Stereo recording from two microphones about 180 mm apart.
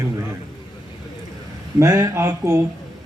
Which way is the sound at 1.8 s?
20° right (ahead or behind).